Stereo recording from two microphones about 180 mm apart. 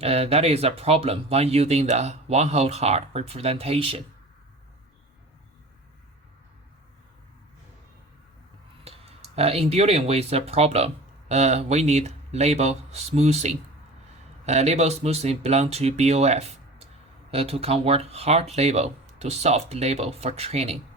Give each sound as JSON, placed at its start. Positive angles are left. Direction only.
{"t": 0.0, "sound": "speech", "side_deg": -35}
{"t": 8.8, "sound": "speech", "side_deg": -35}